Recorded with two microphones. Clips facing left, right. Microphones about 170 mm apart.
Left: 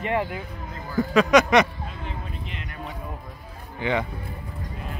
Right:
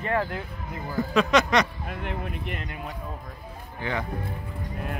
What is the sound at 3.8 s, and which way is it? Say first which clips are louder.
Speech: left 5 dB; 20° left (ahead or behind).